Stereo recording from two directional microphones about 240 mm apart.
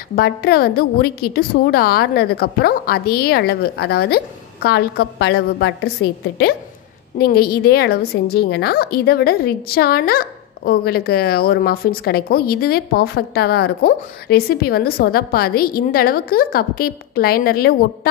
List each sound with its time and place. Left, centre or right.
0.1 s a woman's voice: left